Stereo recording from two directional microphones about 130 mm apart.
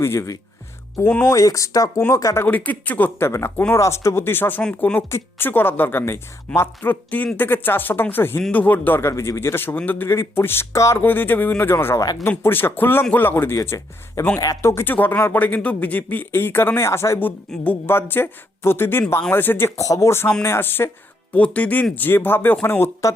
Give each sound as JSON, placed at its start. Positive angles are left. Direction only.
{"t": 0.0, "sound": "speech", "side_deg": 20}
{"t": 1.3, "sound": "speech", "side_deg": 25}